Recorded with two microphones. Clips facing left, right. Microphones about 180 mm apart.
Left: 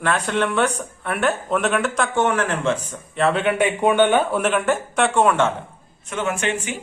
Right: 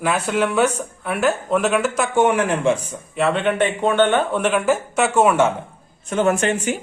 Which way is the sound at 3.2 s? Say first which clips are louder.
Even; centre (ahead or behind).